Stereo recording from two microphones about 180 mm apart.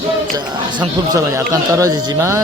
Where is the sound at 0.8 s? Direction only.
20° right (ahead or behind).